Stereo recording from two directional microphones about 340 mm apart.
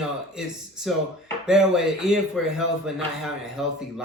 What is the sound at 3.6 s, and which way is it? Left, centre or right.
Speech, centre.